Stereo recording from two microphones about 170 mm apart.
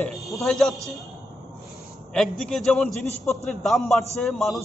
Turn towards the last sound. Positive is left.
turn(degrees=0)  # may be behind; listen again after turning